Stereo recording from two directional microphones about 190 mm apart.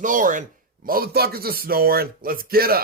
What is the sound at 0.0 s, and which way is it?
Speech, 45° right (ahead or behind).